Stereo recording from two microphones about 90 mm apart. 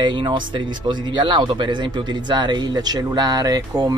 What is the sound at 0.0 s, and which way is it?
A man's voice, 60° right (ahead or behind).